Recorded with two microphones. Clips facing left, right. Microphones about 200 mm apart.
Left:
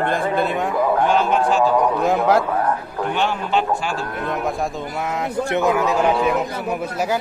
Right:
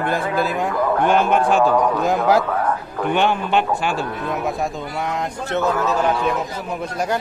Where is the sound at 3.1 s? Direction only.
60° right (ahead or behind).